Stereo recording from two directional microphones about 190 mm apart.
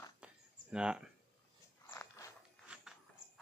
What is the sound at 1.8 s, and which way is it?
Biting, 15° left (ahead or behind).